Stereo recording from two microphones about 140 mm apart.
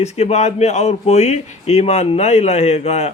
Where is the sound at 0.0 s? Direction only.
50° left (ahead or behind).